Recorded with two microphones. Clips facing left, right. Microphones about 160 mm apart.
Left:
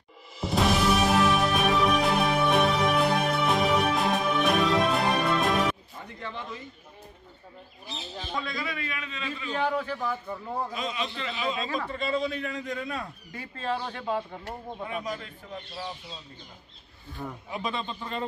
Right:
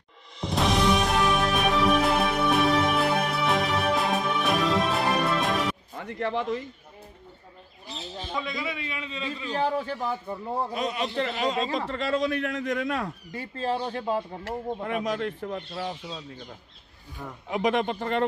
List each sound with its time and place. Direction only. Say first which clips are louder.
0.4 s music: even; 5° left (ahead or behind)
5.9 s a sound: right 9 dB; 75° right (ahead or behind)
8.4 s a man's voice: right 1 dB; 20° right (ahead or behind)
10.7 s speech: right 4 dB; 60° right (ahead or behind)
13.3 s speech: right 2 dB; 30° right (ahead or behind)
14.4 s speech: right 6 dB; 70° right (ahead or behind)
17.5 s speech: right 10 dB; 80° right